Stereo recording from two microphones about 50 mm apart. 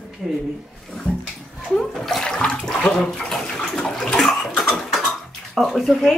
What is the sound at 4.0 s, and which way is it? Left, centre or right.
Bathtub, centre.